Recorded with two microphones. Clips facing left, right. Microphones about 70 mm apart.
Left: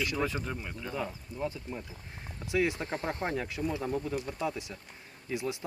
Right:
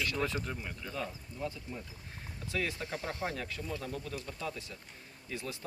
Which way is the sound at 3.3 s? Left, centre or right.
Centre.